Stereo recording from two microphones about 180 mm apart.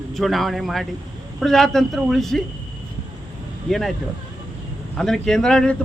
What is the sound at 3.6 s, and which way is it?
Speech, centre (ahead or behind).